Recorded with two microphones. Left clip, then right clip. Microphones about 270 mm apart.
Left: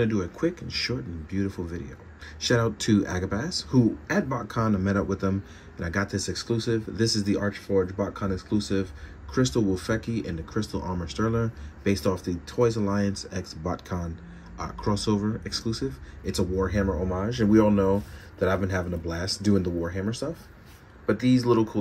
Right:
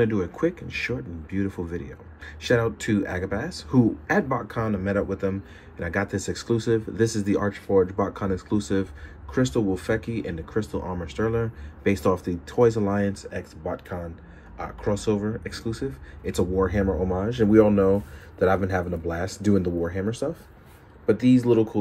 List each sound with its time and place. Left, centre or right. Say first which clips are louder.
0.0 s speech: right 3 dB; centre
21.2 s speech: right 3 dB; right